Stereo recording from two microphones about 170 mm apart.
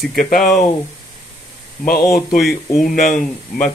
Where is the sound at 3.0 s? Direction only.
55° left (ahead or behind).